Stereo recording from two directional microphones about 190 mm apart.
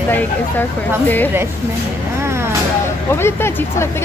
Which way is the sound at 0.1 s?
10° left (ahead or behind).